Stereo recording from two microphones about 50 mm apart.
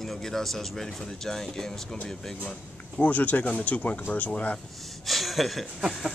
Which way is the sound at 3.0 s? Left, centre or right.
Left.